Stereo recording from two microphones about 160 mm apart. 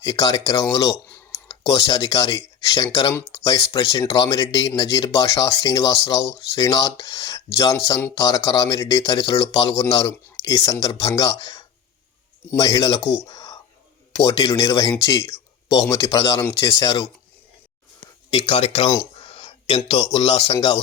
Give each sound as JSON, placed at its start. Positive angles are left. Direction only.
{"t": 0.1, "sound": "speech", "side_deg": 20}
{"t": 18.3, "sound": "speech", "side_deg": 35}